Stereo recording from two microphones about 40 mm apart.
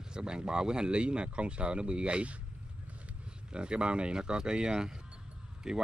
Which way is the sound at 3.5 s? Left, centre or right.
Right.